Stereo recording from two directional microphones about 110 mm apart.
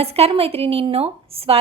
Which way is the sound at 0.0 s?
65° right (ahead or behind).